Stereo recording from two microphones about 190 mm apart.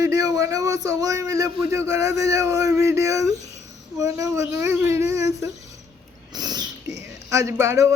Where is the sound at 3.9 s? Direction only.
15° right (ahead or behind).